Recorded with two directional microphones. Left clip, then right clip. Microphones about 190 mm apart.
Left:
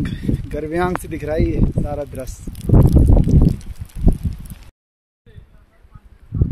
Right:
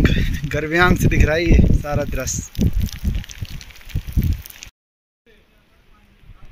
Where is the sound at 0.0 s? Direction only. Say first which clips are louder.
Right 4 dB; 10° left (ahead or behind).